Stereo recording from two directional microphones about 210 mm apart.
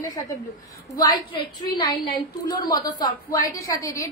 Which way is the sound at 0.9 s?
20° left (ahead or behind).